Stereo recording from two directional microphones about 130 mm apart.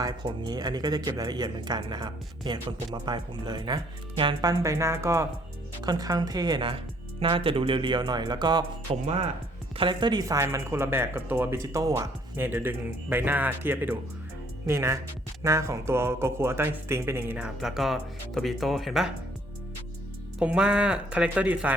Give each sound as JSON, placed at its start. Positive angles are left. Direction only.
{"t": 0.0, "sound": "speech", "side_deg": -30}
{"t": 20.4, "sound": "speech", "side_deg": -10}